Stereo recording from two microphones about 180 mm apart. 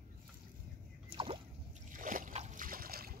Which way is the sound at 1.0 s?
30° right (ahead or behind).